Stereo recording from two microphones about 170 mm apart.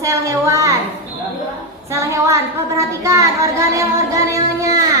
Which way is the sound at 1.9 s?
20° right (ahead or behind).